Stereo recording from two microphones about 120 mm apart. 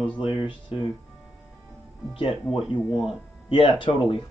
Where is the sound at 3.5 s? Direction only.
45° left (ahead or behind).